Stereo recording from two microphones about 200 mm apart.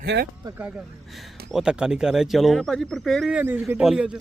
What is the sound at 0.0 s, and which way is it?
Speech, 55° right (ahead or behind).